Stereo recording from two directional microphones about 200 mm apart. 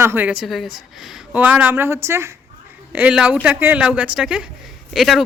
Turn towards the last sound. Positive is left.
turn(degrees=0)  # may be behind; listen again after turning